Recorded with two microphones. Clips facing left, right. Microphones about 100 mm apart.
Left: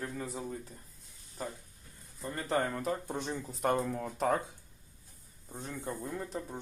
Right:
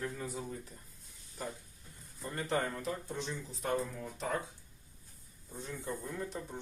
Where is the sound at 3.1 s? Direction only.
50° left (ahead or behind).